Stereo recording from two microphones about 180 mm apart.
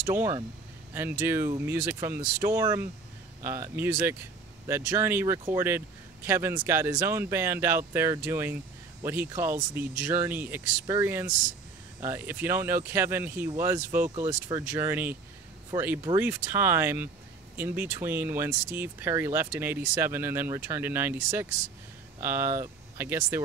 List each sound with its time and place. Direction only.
0.1 s speech: 15° right (ahead or behind)